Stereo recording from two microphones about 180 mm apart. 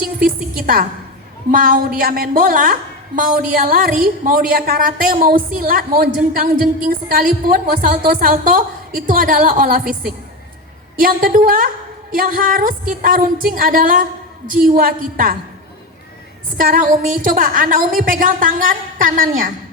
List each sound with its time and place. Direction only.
1.5 s a woman's voice: 50° right (ahead or behind)
11.0 s a woman's voice: 50° right (ahead or behind)
16.6 s a woman's voice: 50° right (ahead or behind)